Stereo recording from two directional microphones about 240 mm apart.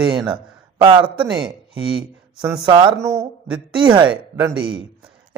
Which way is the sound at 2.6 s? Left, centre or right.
Centre.